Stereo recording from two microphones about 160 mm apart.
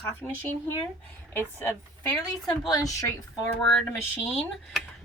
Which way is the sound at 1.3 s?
15° left (ahead or behind).